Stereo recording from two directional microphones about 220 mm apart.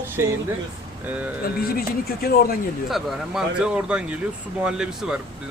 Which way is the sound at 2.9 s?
Centre (ahead or behind).